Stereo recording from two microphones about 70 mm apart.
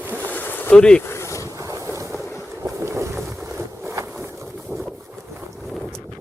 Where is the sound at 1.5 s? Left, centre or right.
Right.